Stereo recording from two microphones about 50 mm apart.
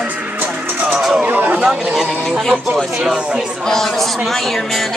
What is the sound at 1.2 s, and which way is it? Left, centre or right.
Chatter, right.